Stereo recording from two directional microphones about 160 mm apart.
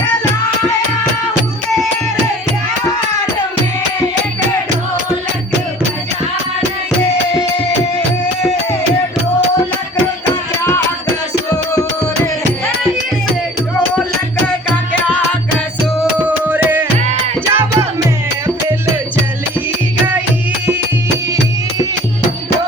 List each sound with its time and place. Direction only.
16.1 s music: 10° right (ahead or behind)